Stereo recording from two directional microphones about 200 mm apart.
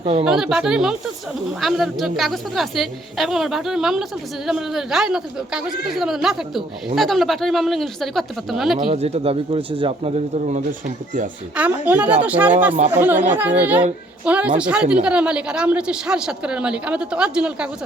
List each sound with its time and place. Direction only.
0.0 s speech: 30° right (ahead or behind)
0.3 s a woman's voice: centre (ahead or behind)
8.9 s speech: 30° right (ahead or behind)
11.5 s a woman's voice: 5° right (ahead or behind)